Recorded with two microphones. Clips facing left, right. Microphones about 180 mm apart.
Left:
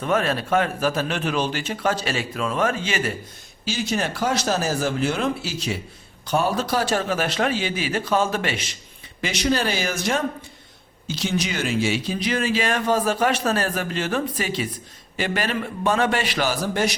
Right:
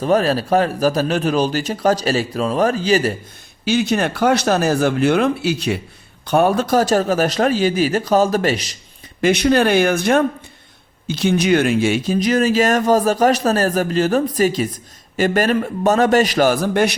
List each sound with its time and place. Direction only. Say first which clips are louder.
0.0 s a man's voice: right 6 dB; 35° right (ahead or behind)
3.7 s a man's voice: right 7 dB; 60° right (ahead or behind); by 8.7 s 40° right (ahead or behind)
9.2 s speech: right 8 dB; 55° right (ahead or behind)